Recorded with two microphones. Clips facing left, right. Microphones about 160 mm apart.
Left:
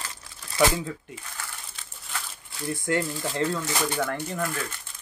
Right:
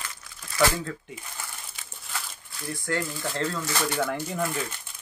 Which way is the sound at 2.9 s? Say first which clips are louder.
Left 2 dB; 20° left (ahead or behind).